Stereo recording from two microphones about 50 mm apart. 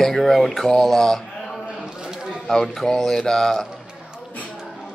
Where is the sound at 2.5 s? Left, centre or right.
Centre.